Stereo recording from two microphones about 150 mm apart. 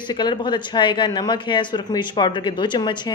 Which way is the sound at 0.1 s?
30° left (ahead or behind).